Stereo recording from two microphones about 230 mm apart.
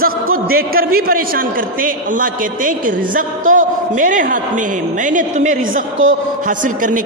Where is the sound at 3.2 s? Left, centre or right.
Right.